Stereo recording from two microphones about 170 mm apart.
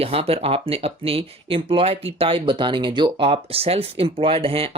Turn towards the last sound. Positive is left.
turn(degrees=-35)  # may be behind; listen again after turning